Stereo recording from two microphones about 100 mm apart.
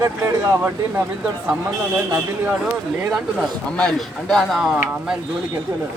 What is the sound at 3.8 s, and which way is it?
Speech, 5° left (ahead or behind).